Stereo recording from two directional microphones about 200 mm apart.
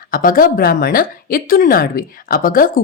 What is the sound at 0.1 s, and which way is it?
Speech, 45° left (ahead or behind).